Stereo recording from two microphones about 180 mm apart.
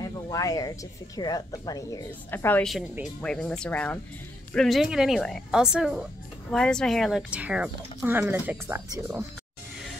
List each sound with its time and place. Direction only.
0.0 s a woman's voice: 20° left (ahead or behind); by 9.2 s 10° right (ahead or behind)